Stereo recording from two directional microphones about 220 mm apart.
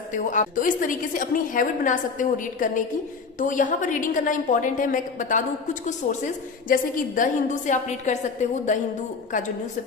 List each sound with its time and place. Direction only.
0.1 s a woman's voice: 35° left (ahead or behind)